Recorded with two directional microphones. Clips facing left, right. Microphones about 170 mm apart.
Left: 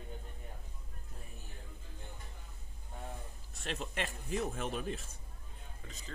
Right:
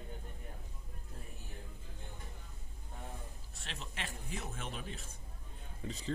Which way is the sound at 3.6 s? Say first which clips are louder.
Left 7 dB; 45° left (ahead or behind).